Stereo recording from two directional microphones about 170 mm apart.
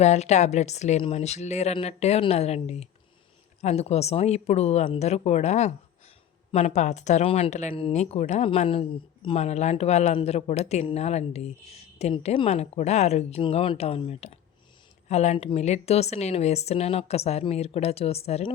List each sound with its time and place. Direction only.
0.0 s speech: 40° left (ahead or behind)